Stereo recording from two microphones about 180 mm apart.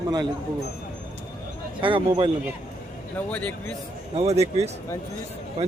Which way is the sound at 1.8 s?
30° right (ahead or behind).